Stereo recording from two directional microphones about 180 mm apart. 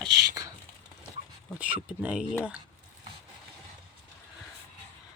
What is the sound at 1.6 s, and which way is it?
Speech, 10° right (ahead or behind).